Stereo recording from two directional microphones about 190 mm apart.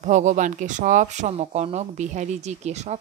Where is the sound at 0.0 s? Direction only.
40° right (ahead or behind).